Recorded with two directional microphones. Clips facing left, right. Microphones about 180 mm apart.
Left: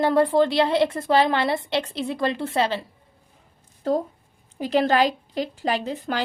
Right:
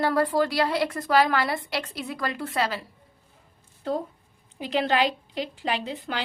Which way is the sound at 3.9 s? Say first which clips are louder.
Left 5 dB; 40° left (ahead or behind).